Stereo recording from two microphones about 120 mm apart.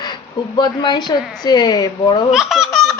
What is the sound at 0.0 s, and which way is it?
A woman's voice, 40° left (ahead or behind).